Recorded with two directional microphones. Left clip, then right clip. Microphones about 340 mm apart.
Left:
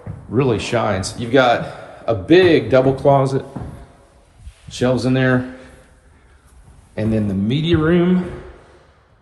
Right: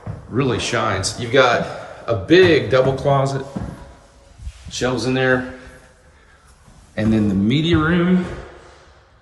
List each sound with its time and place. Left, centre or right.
0.3 s a man's voice: centre
4.7 s a man's voice: centre
6.9 s speech: centre